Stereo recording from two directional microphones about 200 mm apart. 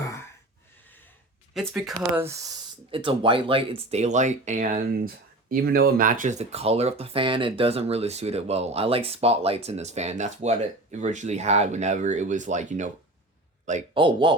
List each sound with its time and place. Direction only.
1.5 s a man's voice: centre (ahead or behind); by 14.0 s 35° right (ahead or behind)
14.0 s speech: 25° right (ahead or behind)